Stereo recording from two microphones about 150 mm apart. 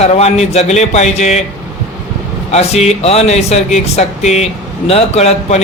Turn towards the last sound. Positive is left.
turn(degrees=45)  # may be behind; listen again after turning